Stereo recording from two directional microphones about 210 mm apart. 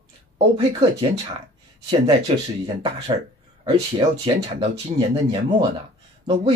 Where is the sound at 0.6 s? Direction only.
25° right (ahead or behind).